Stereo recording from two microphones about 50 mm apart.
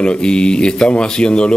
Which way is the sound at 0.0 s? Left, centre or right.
Centre.